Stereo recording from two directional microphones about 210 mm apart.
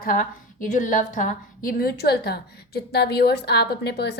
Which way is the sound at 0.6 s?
35° left (ahead or behind).